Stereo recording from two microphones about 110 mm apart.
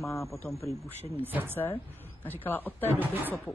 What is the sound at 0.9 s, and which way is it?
Speech, 65° left (ahead or behind).